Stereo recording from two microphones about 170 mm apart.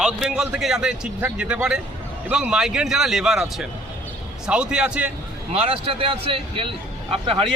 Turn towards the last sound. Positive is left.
turn(degrees=-30)  # may be behind; listen again after turning